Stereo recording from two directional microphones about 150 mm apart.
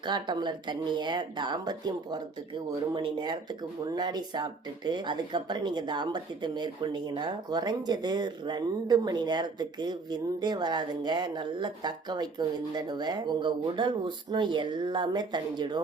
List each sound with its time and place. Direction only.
0.1 s speech: 30° right (ahead or behind)